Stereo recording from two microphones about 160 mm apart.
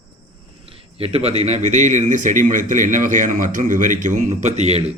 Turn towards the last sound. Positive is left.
turn(degrees=-40)  # may be behind; listen again after turning